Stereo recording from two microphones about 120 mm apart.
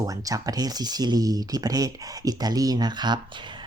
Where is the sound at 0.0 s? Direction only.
30° right (ahead or behind).